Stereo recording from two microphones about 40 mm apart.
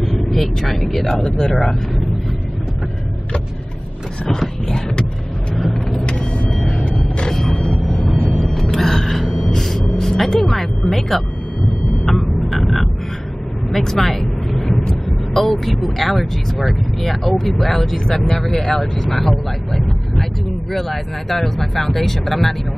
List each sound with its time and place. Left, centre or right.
0.0 s vehicle: centre
0.9 s speech: centre
4.3 s a sound: centre
5.6 s vehicle: centre
6.0 s vehicle: left
6.5 s vehicle: centre
6.9 s a sound: centre
7.6 s vehicle: centre
8.1 s a sound: centre
9.5 s music: centre
12.0 s a sound: centre
13.7 s vehicle: centre
15.3 s speech: centre